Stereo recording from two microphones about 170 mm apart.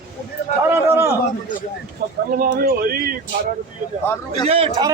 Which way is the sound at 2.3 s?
55° right (ahead or behind).